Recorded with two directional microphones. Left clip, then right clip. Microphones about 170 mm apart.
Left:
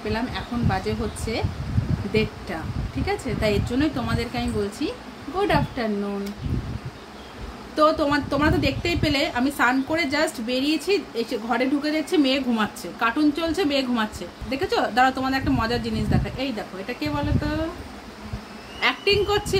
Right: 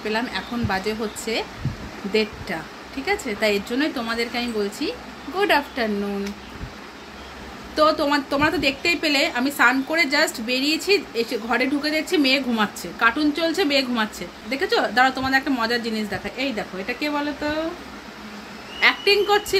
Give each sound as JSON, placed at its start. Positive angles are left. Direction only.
{"t": 0.0, "sound": "a woman's voice", "side_deg": 0}
{"t": 7.7, "sound": "a woman's voice", "side_deg": 0}
{"t": 16.3, "sound": "speech", "side_deg": -20}
{"t": 18.8, "sound": "a woman's voice", "side_deg": 0}